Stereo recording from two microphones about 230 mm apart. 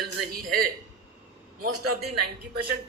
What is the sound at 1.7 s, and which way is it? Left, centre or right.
Speech, right.